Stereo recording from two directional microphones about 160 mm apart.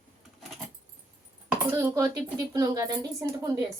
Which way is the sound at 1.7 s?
20° right (ahead or behind).